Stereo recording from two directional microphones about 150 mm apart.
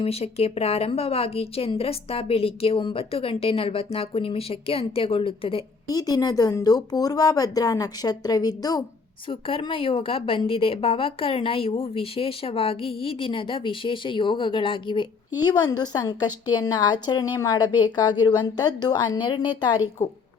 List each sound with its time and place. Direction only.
0.0 s a woman's voice: 40° left (ahead or behind)
5.9 s speech: 25° left (ahead or behind)
9.3 s a woman's voice: 35° left (ahead or behind)
20.0 s speech: 20° left (ahead or behind)